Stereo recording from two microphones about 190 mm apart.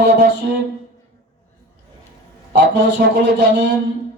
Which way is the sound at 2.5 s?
65° right (ahead or behind).